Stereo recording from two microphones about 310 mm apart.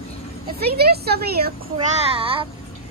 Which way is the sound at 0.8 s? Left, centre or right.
Right.